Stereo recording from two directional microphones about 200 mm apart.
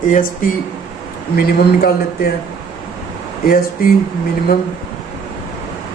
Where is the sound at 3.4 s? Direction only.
45° left (ahead or behind).